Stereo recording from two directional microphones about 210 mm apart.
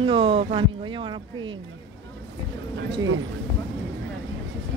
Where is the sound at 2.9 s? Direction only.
65° right (ahead or behind).